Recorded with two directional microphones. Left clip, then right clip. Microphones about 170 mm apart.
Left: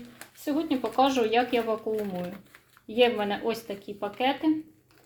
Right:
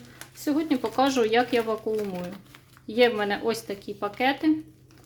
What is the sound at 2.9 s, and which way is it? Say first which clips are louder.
Speech: right 2 dB; 40° right (ahead or behind).